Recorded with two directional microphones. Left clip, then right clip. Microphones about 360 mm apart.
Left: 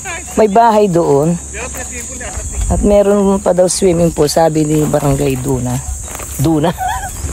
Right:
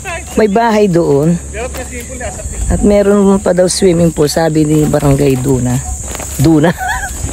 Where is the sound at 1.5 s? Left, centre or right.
Right.